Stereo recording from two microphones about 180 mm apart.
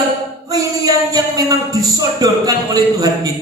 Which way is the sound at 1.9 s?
20° right (ahead or behind).